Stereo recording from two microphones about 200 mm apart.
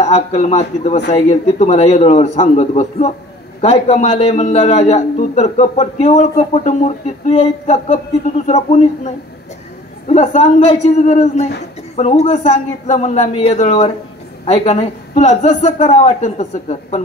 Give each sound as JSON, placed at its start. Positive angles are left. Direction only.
{"t": 0.0, "sound": "speech", "side_deg": 35}